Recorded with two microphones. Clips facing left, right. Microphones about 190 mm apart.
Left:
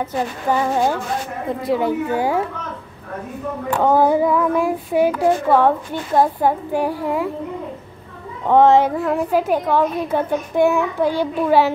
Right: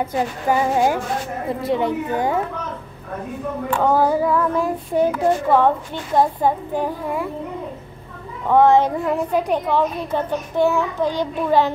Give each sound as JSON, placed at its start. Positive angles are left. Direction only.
{"t": 0.0, "sound": "speech", "side_deg": -10}
{"t": 1.6, "sound": "a woman's voice", "side_deg": 0}
{"t": 3.9, "sound": "a child's voice", "side_deg": 15}
{"t": 8.5, "sound": "a child's voice", "side_deg": 20}
{"t": 9.0, "sound": "a child's voice", "side_deg": 0}